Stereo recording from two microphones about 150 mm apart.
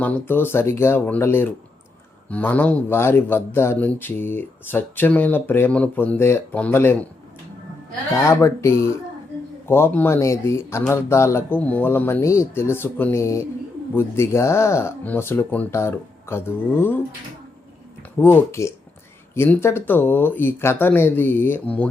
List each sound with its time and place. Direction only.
0.0 s a man's voice: 15° left (ahead or behind)
8.1 s a man's voice: 20° left (ahead or behind)
18.2 s a man's voice: 15° left (ahead or behind)